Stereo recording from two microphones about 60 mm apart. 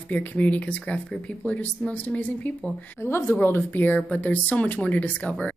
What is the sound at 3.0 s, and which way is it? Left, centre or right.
Speech, left.